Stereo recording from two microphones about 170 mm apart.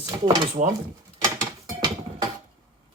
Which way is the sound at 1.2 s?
20° right (ahead or behind).